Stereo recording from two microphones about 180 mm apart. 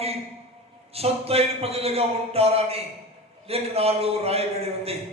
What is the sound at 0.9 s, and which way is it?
A man's voice, 35° right (ahead or behind).